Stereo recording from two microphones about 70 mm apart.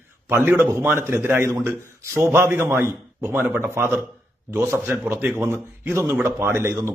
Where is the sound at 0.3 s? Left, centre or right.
Right.